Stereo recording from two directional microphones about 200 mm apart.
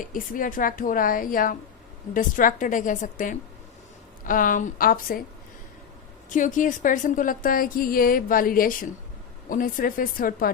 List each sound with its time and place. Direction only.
0.0 s a woman's voice: 45° left (ahead or behind)
6.3 s a woman's voice: 40° left (ahead or behind)